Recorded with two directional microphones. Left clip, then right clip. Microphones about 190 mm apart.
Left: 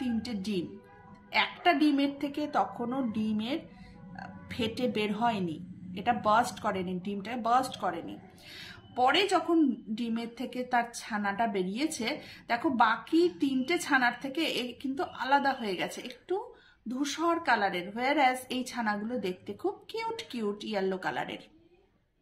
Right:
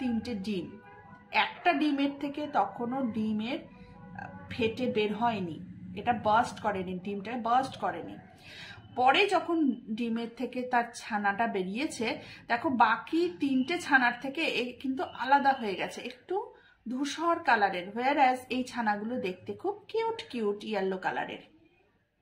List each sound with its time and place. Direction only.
0.2 s music: 20° left (ahead or behind)
1.3 s a woman's voice: 20° left (ahead or behind)